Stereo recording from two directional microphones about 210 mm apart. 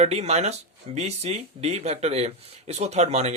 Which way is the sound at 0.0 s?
30° right (ahead or behind).